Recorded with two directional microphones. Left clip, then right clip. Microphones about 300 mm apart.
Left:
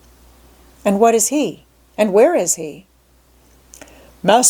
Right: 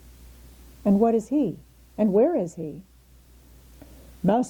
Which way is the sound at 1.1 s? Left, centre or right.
Centre.